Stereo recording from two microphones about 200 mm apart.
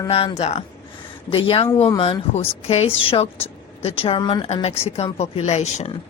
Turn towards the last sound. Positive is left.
turn(degrees=35)  # may be behind; listen again after turning